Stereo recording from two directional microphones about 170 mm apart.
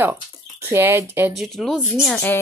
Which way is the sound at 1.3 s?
Centre (ahead or behind).